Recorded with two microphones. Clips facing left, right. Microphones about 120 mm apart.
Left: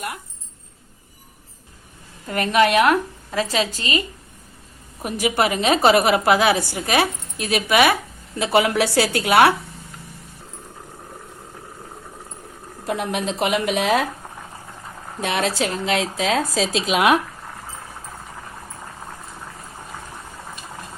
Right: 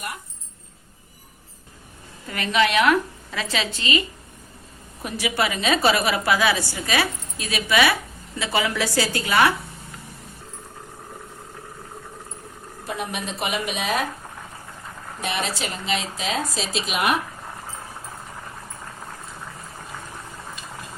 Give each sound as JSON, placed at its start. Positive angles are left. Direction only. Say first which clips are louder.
{"t": 2.3, "sound": "a woman's voice", "louder": "left 4 dB", "side_deg": 45}
{"t": 5.0, "sound": "a woman's voice", "louder": "left 4 dB", "side_deg": 50}
{"t": 12.9, "sound": "speech", "louder": "left 6 dB", "side_deg": 90}
{"t": 15.2, "sound": "speech", "louder": "left 6 dB", "side_deg": 90}